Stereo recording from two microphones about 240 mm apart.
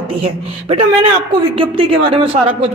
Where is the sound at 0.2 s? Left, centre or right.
Right.